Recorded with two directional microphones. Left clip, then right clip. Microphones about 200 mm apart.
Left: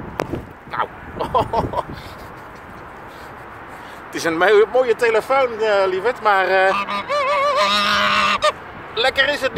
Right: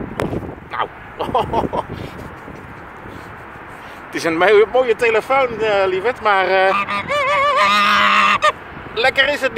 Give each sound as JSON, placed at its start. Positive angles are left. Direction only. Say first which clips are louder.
{"t": 0.7, "sound": "speech", "louder": "left 1 dB", "side_deg": -25}
{"t": 4.1, "sound": "speech", "louder": "right 2 dB", "side_deg": -15}
{"t": 6.7, "sound": "goose", "louder": "right 2 dB", "side_deg": 5}
{"t": 8.9, "sound": "a man's voice", "louder": "right 2 dB", "side_deg": -20}